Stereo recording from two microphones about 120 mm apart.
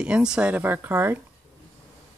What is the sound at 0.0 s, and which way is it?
Speech, 10° right (ahead or behind).